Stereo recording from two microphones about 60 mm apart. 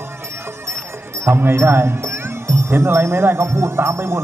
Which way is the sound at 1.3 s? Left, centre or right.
Right.